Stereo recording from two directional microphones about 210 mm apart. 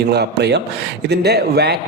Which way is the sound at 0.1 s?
50° right (ahead or behind).